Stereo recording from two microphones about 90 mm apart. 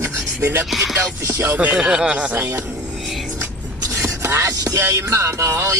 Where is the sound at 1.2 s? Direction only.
30° right (ahead or behind).